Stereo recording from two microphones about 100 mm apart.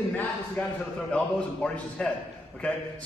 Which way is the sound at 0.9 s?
10° left (ahead or behind).